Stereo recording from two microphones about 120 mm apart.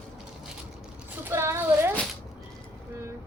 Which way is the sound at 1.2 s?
20° right (ahead or behind).